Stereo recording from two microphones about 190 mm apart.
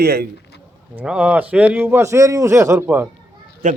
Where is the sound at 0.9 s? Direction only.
5° right (ahead or behind).